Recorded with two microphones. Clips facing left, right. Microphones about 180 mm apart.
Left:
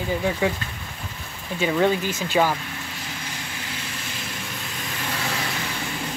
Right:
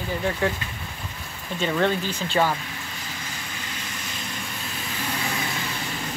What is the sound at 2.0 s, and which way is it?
Speech, 45° left (ahead or behind).